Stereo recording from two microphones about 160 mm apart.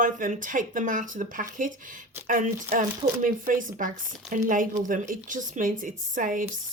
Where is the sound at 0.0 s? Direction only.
55° right (ahead or behind).